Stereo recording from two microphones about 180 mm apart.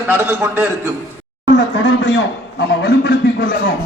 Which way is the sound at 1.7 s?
85° left.